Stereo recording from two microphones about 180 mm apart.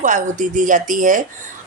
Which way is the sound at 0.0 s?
45° right (ahead or behind).